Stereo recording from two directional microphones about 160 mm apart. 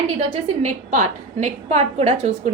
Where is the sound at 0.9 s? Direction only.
50° right (ahead or behind).